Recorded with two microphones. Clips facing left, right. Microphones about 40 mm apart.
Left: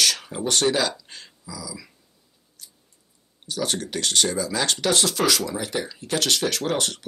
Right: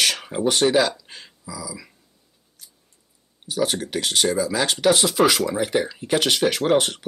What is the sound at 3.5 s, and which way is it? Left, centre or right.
Speech, centre.